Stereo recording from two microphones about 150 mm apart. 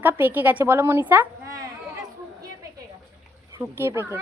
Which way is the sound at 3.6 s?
15° right (ahead or behind).